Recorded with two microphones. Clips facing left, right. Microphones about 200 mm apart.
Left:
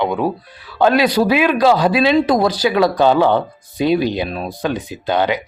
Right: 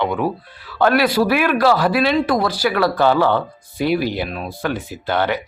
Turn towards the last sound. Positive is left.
turn(degrees=15)  # may be behind; listen again after turning